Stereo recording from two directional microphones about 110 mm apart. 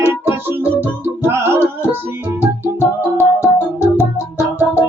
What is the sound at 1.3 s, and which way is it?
Music, 20° right (ahead or behind).